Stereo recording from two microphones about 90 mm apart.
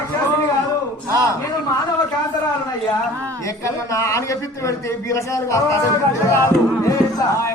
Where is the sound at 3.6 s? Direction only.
35° left (ahead or behind).